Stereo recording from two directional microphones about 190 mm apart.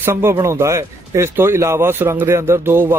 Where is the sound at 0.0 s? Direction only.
15° right (ahead or behind).